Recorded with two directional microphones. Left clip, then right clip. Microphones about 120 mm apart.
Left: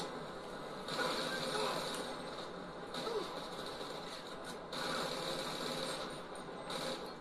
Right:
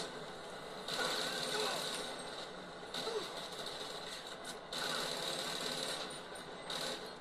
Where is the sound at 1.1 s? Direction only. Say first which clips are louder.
Even; 35° right (ahead or behind).